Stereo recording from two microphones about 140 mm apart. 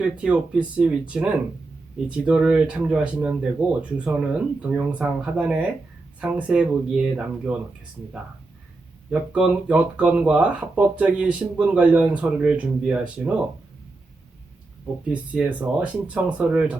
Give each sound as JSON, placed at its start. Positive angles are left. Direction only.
{"t": 0.0, "sound": "speech", "side_deg": -5}
{"t": 9.0, "sound": "speech", "side_deg": -5}
{"t": 15.1, "sound": "speech", "side_deg": -10}